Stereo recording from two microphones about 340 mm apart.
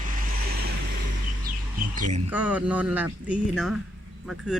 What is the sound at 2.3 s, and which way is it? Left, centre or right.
Speech, centre.